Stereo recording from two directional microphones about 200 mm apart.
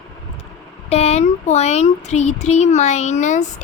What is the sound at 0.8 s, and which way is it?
Speech, 30° left (ahead or behind).